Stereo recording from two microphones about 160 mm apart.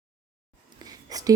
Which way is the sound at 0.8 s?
25° right (ahead or behind).